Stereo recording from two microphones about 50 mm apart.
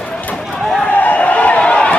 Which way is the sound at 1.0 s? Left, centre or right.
Left.